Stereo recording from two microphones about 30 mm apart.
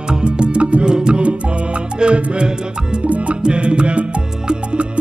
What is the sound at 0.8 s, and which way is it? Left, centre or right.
Music, right.